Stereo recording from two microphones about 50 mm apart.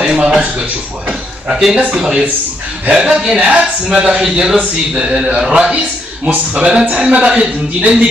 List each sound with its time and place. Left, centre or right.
0.0 s a sound: centre
1.0 s a man's voice: centre
4.2 s speech: centre
5.5 s a man's voice: right